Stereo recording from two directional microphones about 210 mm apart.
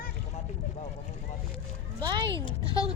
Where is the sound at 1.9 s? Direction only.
20° right (ahead or behind).